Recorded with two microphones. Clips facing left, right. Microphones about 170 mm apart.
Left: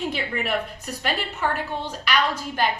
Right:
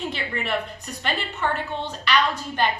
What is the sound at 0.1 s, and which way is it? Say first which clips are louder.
A woman's voice: left 1 dB; 10° left (ahead or behind).